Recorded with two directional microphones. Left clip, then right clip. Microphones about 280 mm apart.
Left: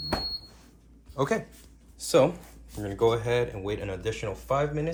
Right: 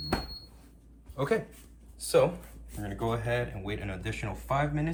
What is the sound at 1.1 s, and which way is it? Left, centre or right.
Speech, centre.